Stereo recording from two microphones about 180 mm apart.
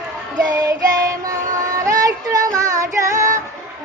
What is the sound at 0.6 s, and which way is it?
Child singing, 20° right (ahead or behind).